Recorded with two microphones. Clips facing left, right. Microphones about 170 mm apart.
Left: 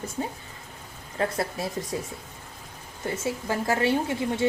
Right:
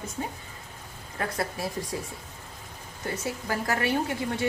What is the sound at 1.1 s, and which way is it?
Speech, 25° left (ahead or behind).